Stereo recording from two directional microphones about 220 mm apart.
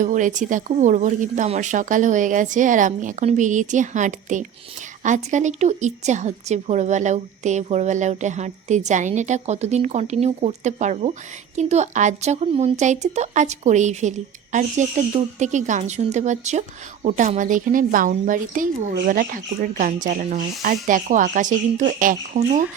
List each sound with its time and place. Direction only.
0.0 s speech: 35° right (ahead or behind)